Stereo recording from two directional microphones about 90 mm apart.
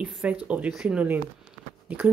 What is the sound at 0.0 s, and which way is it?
Speech, 15° right (ahead or behind).